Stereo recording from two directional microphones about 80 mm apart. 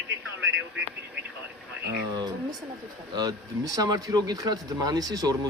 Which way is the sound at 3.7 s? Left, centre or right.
Right.